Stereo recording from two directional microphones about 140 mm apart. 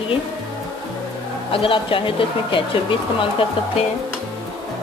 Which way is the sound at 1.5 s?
40° left (ahead or behind).